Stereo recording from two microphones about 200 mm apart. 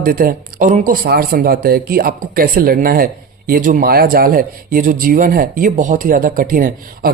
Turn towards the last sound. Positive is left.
turn(degrees=-45)  # may be behind; listen again after turning